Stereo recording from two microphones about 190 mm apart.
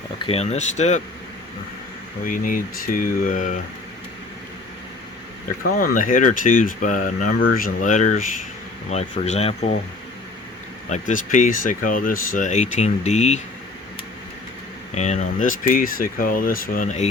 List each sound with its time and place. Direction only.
0.2 s speech: 30° left (ahead or behind)
2.2 s speech: 45° left (ahead or behind)
5.8 s speech: 45° left (ahead or behind)
10.8 s speech: 40° left (ahead or behind)
14.9 s speech: 40° left (ahead or behind)